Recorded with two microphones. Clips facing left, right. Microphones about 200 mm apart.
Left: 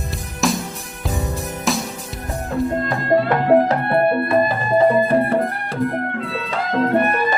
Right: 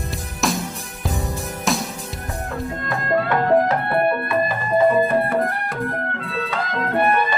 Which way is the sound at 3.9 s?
30° left (ahead or behind).